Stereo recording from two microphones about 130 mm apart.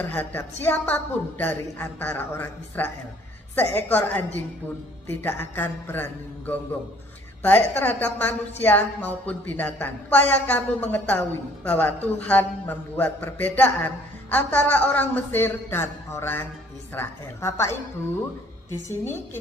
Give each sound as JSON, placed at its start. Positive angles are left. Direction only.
{"t": 0.0, "sound": "a woman's voice", "side_deg": 15}
{"t": 18.9, "sound": "a woman's voice", "side_deg": 20}